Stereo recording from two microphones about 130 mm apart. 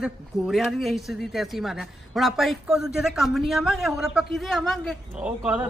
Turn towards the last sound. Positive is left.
turn(degrees=-10)  # may be behind; listen again after turning